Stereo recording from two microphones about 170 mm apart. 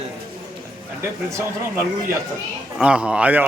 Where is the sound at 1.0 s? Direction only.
15° right (ahead or behind).